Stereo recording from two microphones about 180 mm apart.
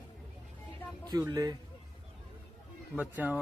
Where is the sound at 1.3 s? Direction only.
20° right (ahead or behind).